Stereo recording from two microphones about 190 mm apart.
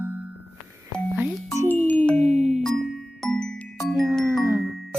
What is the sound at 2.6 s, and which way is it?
Glockenspiel, centre (ahead or behind).